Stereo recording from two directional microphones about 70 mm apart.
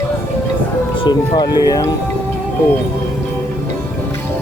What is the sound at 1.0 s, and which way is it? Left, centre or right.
Speech, left.